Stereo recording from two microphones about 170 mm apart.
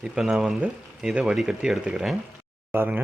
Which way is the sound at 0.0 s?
Centre (ahead or behind).